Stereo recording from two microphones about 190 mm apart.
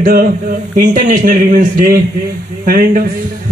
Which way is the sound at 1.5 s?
50° right (ahead or behind).